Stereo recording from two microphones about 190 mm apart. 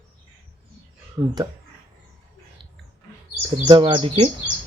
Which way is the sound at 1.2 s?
20° right (ahead or behind).